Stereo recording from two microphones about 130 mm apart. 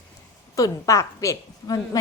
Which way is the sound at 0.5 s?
25° left (ahead or behind).